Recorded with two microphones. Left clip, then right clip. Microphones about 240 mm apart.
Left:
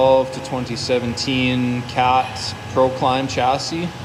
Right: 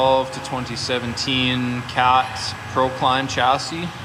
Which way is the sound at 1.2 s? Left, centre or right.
Right.